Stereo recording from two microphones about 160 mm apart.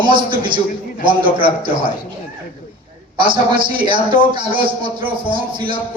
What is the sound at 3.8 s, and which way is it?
A man's voice, 30° right (ahead or behind).